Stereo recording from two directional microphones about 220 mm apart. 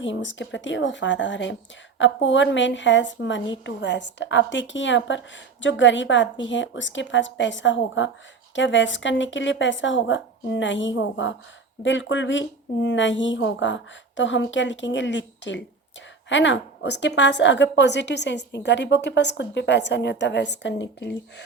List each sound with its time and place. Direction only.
0.0 s a woman's voice: 55° left (ahead or behind)